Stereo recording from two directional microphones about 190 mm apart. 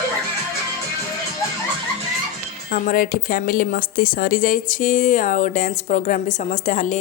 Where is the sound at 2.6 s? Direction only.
45° left (ahead or behind).